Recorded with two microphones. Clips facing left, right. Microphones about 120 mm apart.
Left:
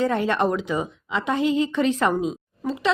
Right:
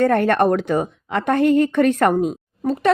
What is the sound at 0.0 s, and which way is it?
A woman's voice, 55° right (ahead or behind).